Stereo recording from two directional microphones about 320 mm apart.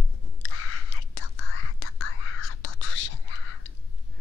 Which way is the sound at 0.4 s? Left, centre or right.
Left.